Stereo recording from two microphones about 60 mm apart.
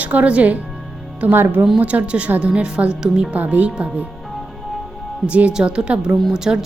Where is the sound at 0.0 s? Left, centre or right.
Right.